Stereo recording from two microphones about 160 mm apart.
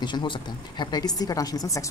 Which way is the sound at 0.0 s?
30° left (ahead or behind).